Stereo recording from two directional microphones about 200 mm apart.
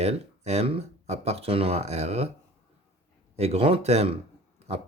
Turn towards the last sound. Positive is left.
turn(degrees=-30)  # may be behind; listen again after turning